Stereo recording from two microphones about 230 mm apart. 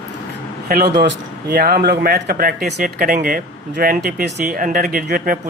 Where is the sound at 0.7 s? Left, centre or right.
Right.